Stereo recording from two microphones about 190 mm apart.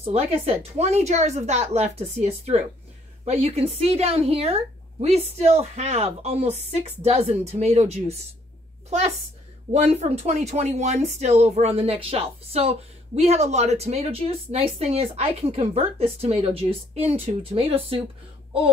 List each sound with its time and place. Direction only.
0.0 s speech: 30° right (ahead or behind)
9.7 s speech: 35° right (ahead or behind)